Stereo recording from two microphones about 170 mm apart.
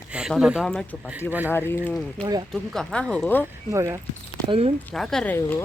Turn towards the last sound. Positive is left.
turn(degrees=10)  # may be behind; listen again after turning